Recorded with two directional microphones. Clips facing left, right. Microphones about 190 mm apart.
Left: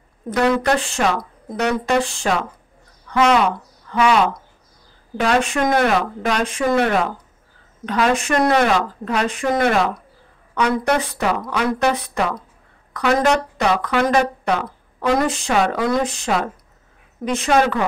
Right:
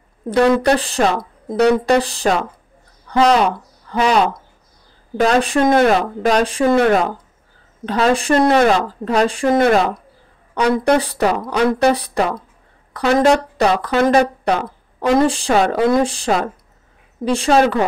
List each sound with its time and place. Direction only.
0.3 s a woman's voice: 35° right (ahead or behind)